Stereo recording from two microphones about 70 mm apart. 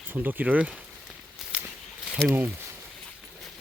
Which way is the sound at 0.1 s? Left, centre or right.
Right.